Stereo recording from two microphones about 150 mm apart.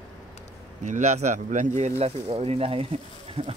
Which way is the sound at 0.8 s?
50° right (ahead or behind).